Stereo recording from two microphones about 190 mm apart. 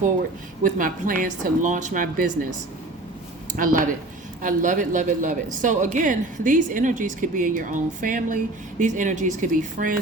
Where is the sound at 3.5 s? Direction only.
45° right (ahead or behind).